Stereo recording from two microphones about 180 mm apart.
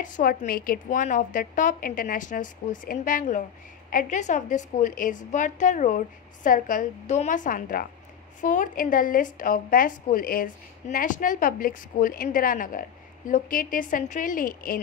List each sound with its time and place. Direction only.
0.0 s a woman's voice: 50° left (ahead or behind)